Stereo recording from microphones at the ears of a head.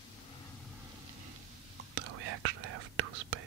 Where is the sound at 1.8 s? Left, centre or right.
Right.